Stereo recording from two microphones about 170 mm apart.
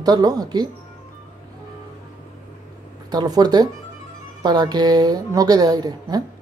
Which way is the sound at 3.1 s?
25° right (ahead or behind).